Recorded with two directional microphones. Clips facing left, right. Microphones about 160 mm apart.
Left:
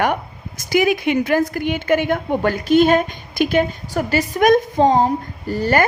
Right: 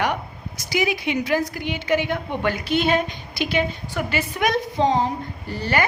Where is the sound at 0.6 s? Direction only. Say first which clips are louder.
Left 6 dB; 50° left (ahead or behind).